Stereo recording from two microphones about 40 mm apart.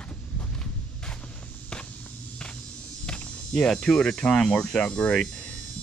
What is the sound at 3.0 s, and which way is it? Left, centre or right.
Cricket, left.